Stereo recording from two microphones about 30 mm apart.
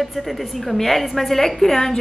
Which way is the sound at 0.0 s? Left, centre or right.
Centre.